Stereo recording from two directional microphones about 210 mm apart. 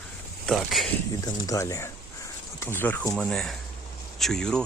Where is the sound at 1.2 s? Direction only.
15° left (ahead or behind).